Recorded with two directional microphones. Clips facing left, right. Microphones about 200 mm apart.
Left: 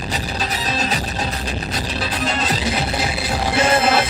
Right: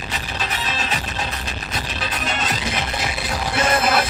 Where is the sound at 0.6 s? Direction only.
35° left (ahead or behind).